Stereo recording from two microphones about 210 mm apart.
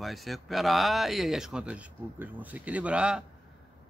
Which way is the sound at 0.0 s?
Centre (ahead or behind).